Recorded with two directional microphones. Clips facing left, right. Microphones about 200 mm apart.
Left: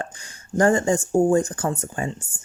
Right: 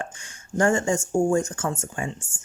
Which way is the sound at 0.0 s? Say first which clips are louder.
Left 2 dB; 35° left (ahead or behind).